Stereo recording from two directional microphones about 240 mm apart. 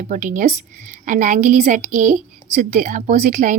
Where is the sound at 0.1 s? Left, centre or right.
Right.